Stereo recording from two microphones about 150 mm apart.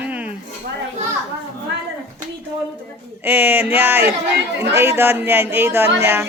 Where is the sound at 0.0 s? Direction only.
10° right (ahead or behind).